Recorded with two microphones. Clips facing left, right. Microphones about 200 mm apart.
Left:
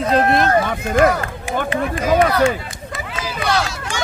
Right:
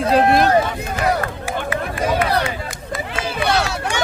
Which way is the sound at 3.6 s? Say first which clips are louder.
Right 4 dB; 65° right (ahead or behind).